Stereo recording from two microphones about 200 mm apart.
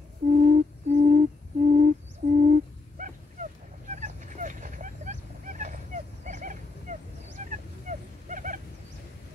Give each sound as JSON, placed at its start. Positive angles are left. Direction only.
{"t": 0.3, "sound": "owl", "side_deg": -40}
{"t": 3.9, "sound": "vehicle", "side_deg": -35}
{"t": 7.9, "sound": "a sound", "side_deg": -40}
{"t": 8.3, "sound": "wild animals", "side_deg": -40}